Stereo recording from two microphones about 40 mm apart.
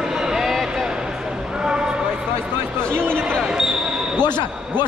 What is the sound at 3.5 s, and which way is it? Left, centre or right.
Basketball bounce, centre.